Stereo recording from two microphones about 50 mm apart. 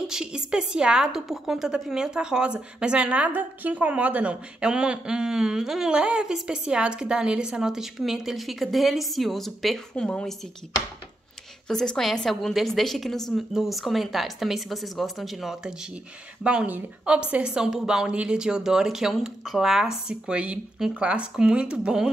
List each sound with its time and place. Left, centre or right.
0.0 s speech: centre
9.9 s a woman's voice: centre
11.6 s speech: centre
17.0 s speech: right
20.1 s speech: centre